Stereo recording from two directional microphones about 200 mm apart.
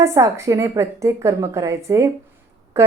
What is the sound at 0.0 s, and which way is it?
A woman's voice, 15° right (ahead or behind).